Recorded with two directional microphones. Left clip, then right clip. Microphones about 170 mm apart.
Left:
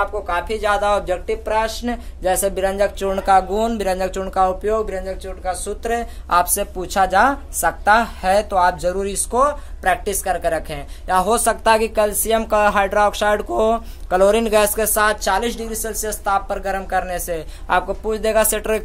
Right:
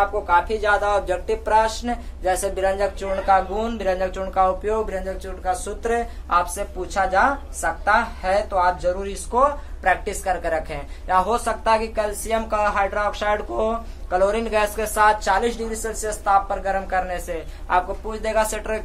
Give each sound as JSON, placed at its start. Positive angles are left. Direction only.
{"t": 0.3, "sound": "speech", "side_deg": 25}
{"t": 1.9, "sound": "a woman's voice", "side_deg": 65}
{"t": 4.6, "sound": "speech", "side_deg": 25}
{"t": 6.2, "sound": "a woman's voice", "side_deg": 70}
{"t": 15.2, "sound": "speech", "side_deg": 35}
{"t": 17.3, "sound": "a woman's voice", "side_deg": 70}